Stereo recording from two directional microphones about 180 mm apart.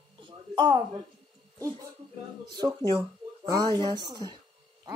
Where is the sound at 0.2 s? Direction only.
20° right (ahead or behind).